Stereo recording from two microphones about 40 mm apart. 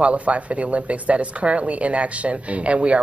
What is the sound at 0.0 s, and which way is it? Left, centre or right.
Speech, right.